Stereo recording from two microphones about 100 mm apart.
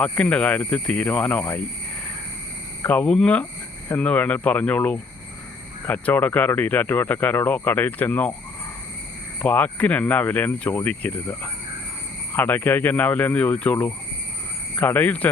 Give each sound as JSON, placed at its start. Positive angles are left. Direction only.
{"t": 0.0, "sound": "speech", "side_deg": 10}
{"t": 2.8, "sound": "speech", "side_deg": 15}
{"t": 9.4, "sound": "speech", "side_deg": 15}